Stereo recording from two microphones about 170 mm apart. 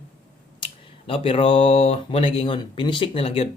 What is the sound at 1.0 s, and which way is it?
A man's voice, 30° left (ahead or behind).